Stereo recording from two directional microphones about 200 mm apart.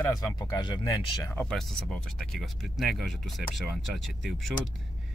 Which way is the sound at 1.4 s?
5° left (ahead or behind).